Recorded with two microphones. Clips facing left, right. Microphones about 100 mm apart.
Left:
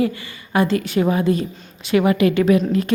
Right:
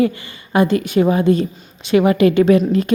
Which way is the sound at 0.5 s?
25° right (ahead or behind).